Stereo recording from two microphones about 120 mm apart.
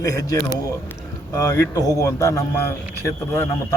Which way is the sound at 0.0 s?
30° left (ahead or behind).